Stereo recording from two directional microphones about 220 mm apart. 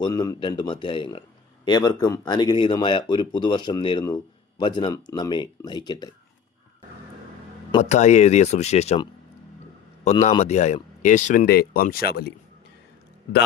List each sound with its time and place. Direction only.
0.0 s speech: 15° left (ahead or behind)
7.7 s speech: 30° left (ahead or behind)
11.4 s speech: 45° left (ahead or behind)